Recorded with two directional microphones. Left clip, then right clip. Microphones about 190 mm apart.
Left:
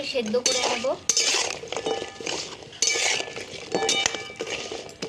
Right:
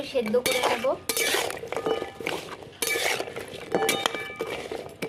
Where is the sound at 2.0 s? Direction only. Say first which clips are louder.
Even; 5° left (ahead or behind).